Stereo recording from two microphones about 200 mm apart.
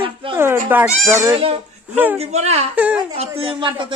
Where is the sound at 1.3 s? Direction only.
30° right (ahead or behind).